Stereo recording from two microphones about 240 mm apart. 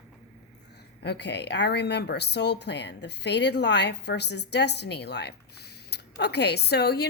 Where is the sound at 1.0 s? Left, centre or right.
Left.